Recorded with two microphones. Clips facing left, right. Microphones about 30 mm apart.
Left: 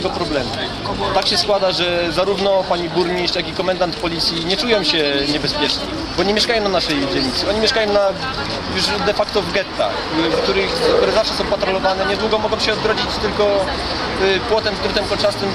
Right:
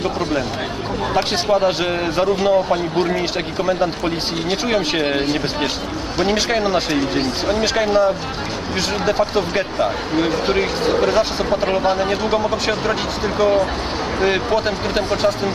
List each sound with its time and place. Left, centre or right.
1.1 s speech: left